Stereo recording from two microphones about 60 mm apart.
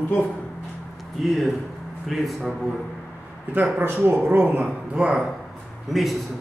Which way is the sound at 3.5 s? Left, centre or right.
Right.